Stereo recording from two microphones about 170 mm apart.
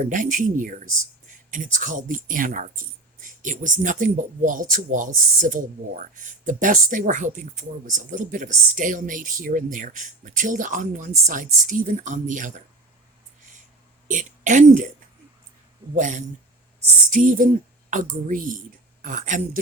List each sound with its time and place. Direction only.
0.0 s speech: 50° right (ahead or behind)
14.1 s speech: 50° right (ahead or behind)
16.0 s speech: 50° right (ahead or behind)